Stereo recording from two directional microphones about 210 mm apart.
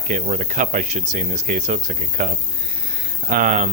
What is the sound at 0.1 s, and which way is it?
Speech, 35° right (ahead or behind).